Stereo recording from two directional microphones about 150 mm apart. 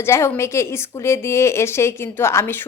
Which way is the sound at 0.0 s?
20° left (ahead or behind).